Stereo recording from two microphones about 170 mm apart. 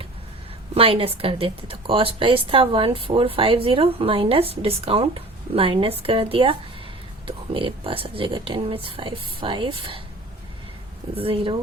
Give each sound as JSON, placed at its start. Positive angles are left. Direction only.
{"t": 0.7, "sound": "speech", "side_deg": -35}
{"t": 11.1, "sound": "speech", "side_deg": -35}